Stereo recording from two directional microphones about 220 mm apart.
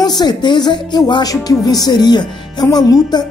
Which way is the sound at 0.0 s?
20° left (ahead or behind).